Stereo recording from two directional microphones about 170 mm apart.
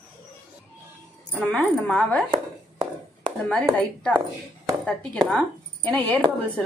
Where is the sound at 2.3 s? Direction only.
30° right (ahead or behind).